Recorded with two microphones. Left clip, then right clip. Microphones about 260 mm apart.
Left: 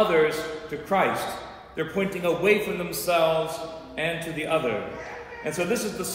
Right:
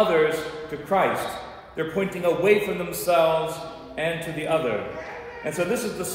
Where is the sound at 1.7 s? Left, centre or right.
Centre.